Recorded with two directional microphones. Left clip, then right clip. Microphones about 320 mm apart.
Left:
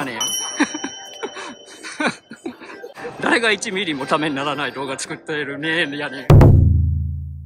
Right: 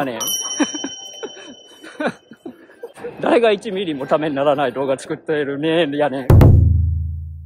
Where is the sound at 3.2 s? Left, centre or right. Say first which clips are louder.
Right 3 dB; centre.